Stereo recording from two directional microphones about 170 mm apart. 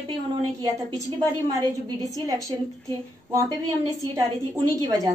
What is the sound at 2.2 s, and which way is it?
Speech, 20° right (ahead or behind).